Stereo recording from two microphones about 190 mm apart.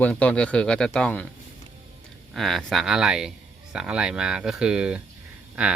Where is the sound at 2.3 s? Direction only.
Centre (ahead or behind).